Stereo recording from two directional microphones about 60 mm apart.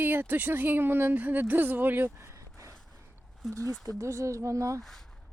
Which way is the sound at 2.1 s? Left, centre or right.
Right.